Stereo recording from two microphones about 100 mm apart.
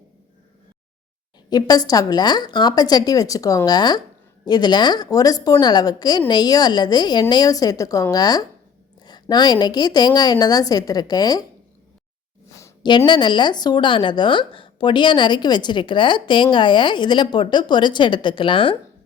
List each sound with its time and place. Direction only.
1.5 s a woman's voice: 40° left (ahead or behind)
13.1 s a woman's voice: 50° left (ahead or behind)